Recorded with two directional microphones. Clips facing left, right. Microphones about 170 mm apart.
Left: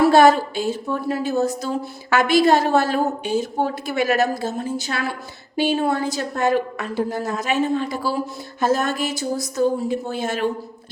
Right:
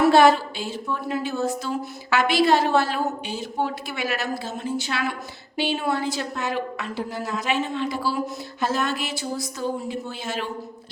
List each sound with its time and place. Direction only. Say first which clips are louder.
0.1 s a woman's voice: left 2 dB; 45° left (ahead or behind)